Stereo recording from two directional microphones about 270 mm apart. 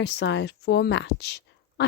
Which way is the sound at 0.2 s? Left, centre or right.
Left.